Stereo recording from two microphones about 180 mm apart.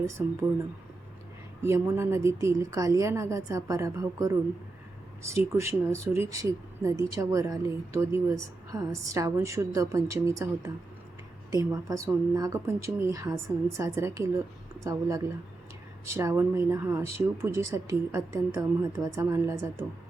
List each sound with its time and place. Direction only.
0.2 s speech: 10° right (ahead or behind)
1.6 s speech: 15° right (ahead or behind)
16.0 s speech: 15° right (ahead or behind)